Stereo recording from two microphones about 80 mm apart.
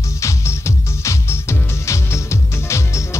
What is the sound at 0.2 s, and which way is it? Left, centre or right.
Music, left.